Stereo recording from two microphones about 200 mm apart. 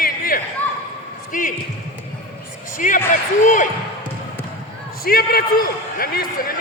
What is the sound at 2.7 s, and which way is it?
Speech, 40° left (ahead or behind).